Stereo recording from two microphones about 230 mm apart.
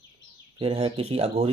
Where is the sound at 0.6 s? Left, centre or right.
Right.